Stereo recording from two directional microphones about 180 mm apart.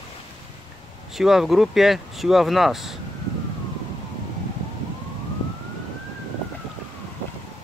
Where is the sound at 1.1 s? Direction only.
Centre (ahead or behind).